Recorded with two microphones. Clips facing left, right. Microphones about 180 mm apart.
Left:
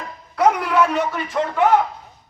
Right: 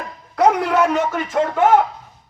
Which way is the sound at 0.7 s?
45° right (ahead or behind).